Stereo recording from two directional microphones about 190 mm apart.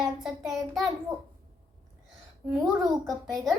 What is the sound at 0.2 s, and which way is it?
Speech, centre (ahead or behind).